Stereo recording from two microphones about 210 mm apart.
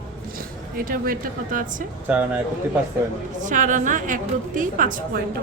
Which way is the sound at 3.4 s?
40° right (ahead or behind).